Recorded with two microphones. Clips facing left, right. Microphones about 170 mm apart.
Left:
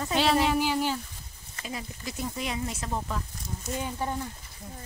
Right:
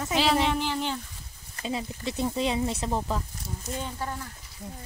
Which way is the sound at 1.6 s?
25° right (ahead or behind).